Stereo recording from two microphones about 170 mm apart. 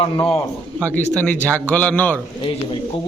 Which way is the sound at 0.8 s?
10° left (ahead or behind).